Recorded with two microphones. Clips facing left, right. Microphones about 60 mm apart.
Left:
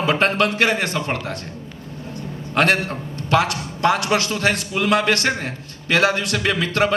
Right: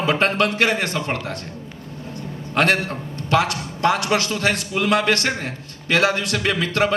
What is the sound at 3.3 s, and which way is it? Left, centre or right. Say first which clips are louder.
A man's voice: left 1 dB; left.